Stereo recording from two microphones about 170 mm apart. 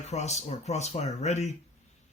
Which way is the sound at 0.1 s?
40° left (ahead or behind).